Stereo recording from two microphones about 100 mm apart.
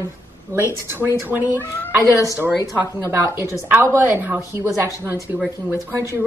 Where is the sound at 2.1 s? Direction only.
35° left (ahead or behind).